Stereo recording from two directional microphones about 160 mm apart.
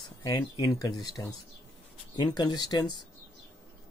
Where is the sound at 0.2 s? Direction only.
25° left (ahead or behind).